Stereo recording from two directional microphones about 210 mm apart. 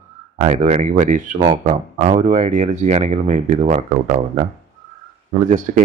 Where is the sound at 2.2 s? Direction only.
35° right (ahead or behind).